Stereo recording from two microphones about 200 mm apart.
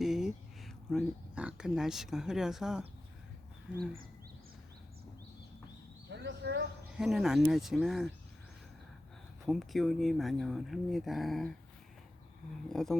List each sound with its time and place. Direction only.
0.0 s speech: centre (ahead or behind)
6.1 s a sound: 60° right (ahead or behind)
6.9 s speech: centre (ahead or behind)
9.5 s speech: centre (ahead or behind)
12.6 s speech: centre (ahead or behind)